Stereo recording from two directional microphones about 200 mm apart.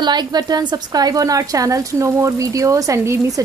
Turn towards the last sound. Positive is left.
turn(degrees=-15)  # may be behind; listen again after turning